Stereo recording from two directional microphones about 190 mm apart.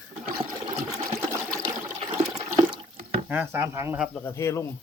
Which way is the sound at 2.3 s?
20° right (ahead or behind).